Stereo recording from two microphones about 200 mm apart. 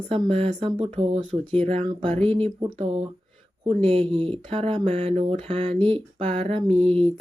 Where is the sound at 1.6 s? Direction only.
30° right (ahead or behind).